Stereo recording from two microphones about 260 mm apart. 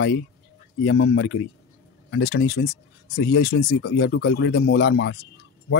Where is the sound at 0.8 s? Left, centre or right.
Left.